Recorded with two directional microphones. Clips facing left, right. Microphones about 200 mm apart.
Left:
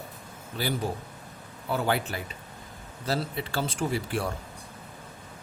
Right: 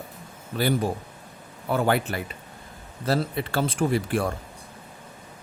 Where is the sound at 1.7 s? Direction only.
55° right (ahead or behind).